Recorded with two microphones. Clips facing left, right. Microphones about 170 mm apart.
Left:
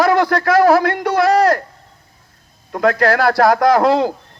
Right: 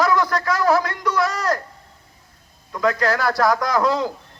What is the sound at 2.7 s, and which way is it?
A man's voice, 65° left (ahead or behind).